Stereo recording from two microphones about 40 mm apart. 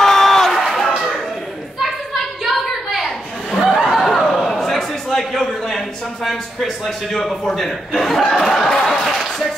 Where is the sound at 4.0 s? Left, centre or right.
Centre.